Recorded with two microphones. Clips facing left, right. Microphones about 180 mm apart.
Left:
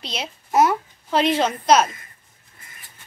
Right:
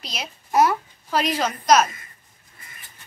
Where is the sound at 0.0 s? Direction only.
30° left (ahead or behind).